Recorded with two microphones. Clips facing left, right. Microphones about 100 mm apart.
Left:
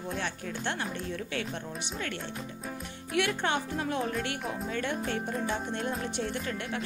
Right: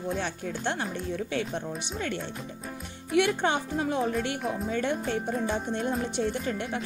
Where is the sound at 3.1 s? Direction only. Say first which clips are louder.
Right 4 dB; 20° right (ahead or behind).